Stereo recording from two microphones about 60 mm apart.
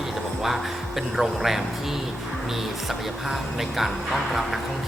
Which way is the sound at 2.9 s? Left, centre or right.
Centre.